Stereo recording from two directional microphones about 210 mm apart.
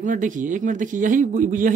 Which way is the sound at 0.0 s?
40° right (ahead or behind).